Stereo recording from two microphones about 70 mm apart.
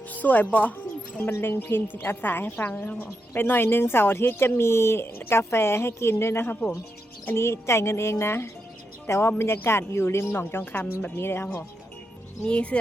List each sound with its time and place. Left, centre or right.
0.1 s speech: left
1.2 s a woman's voice: left
10.2 s a woman's voice: left
12.5 s speech: centre